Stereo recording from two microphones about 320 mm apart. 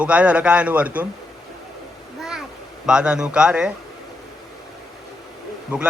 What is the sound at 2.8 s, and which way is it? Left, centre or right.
Speech, centre.